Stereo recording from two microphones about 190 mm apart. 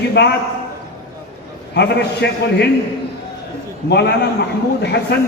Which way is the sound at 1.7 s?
65° left (ahead or behind).